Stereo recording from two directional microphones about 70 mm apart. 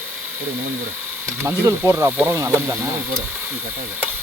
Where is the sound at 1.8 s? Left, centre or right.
Right.